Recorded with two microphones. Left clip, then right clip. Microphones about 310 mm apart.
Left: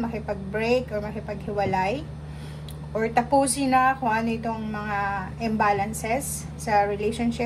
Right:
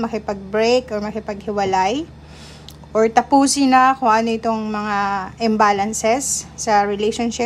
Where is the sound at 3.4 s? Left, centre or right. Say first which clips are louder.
Right 8 dB; centre.